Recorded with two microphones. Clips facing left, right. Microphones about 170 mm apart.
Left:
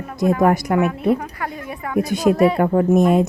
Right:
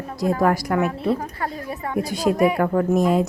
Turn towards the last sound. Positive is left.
turn(degrees=20)  # may be behind; listen again after turning